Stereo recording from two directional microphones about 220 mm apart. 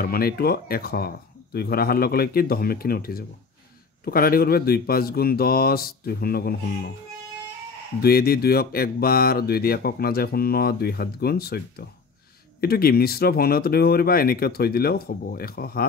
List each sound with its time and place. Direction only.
0.0 s mantra: 45° left (ahead or behind)
8.0 s mantra: 45° left (ahead or behind)